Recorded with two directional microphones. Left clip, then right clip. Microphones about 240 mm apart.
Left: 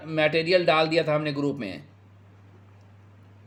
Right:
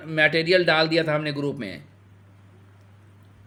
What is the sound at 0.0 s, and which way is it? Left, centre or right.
Speech, centre.